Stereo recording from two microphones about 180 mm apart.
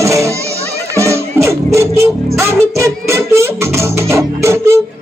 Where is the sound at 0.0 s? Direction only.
15° right (ahead or behind).